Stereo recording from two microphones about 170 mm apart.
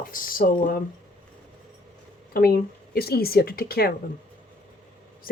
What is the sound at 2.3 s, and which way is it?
Speech, 65° left (ahead or behind).